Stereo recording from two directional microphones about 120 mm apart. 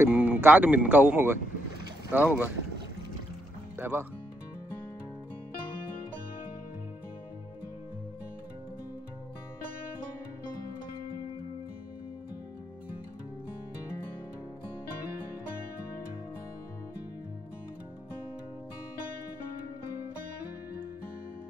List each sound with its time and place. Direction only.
0.0 s speech: 15° right (ahead or behind)
3.7 s speech: 15° right (ahead or behind)